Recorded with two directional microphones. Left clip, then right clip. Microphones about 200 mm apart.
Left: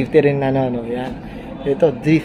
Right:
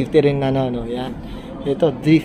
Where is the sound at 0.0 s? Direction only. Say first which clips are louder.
Left 1 dB; 5° left (ahead or behind).